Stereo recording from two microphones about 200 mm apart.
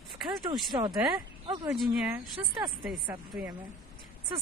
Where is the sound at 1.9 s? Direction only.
Centre (ahead or behind).